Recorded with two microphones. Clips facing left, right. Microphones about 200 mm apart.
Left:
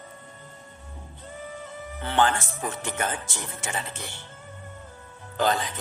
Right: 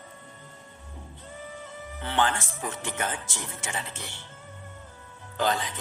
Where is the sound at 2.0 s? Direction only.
45° left (ahead or behind).